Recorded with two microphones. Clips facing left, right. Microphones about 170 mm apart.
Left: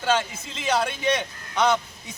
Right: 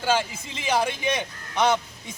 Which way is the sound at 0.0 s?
10° right (ahead or behind).